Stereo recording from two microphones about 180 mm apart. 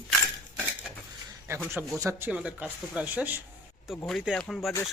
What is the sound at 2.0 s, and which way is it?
Speech, 15° right (ahead or behind).